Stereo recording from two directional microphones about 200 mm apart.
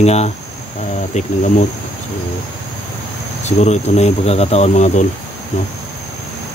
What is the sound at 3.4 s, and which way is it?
Cricket, 35° left (ahead or behind).